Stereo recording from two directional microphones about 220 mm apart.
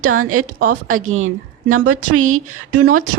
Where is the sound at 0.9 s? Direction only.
70° right (ahead or behind).